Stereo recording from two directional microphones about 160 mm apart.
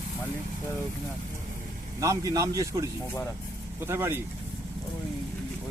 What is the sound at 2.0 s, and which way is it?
Speech, 20° right (ahead or behind).